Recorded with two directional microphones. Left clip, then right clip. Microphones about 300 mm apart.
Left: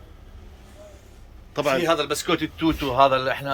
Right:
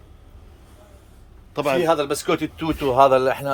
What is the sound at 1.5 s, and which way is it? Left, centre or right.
Speech, centre.